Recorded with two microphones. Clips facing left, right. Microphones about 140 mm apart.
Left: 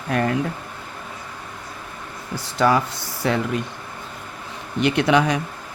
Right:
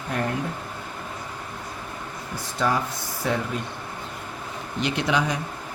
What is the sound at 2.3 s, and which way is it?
Speech, 75° left (ahead or behind).